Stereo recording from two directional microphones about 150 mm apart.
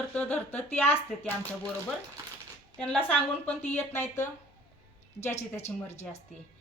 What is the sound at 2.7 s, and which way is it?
A woman's voice, 5° left (ahead or behind).